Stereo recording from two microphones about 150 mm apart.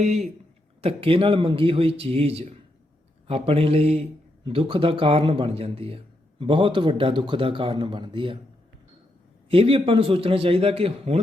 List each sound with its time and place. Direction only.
0.0 s a man's voice: 50° right (ahead or behind)
9.5 s a man's voice: 40° right (ahead or behind)